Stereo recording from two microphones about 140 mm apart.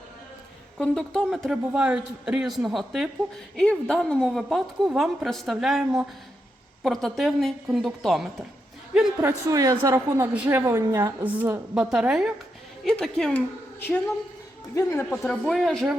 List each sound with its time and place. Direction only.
0.8 s a woman's voice: 5° left (ahead or behind)
9.5 s a woman's voice: 25° right (ahead or behind)
10.3 s a woman's voice: 10° right (ahead or behind)
10.6 s a woman's voice: 20° right (ahead or behind)
11.2 s a woman's voice: 10° right (ahead or behind); by 15.0 s 20° left (ahead or behind)
15.1 s a woman's voice: 5° left (ahead or behind)